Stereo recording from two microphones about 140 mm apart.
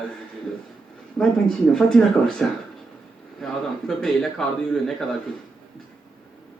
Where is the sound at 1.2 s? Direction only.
5° left (ahead or behind).